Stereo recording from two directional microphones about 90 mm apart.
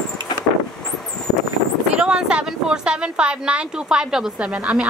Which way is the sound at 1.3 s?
50° left (ahead or behind).